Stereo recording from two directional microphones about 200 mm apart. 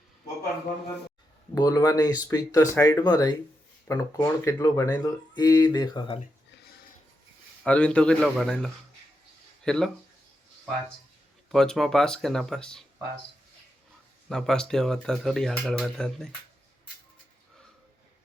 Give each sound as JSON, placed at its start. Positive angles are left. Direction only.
{"t": 1.5, "sound": "speech", "side_deg": 20}
{"t": 7.6, "sound": "speech", "side_deg": 5}
{"t": 11.5, "sound": "speech", "side_deg": 5}
{"t": 14.3, "sound": "speech", "side_deg": 0}